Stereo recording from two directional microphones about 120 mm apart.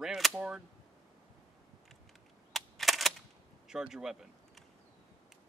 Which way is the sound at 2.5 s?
Centre (ahead or behind).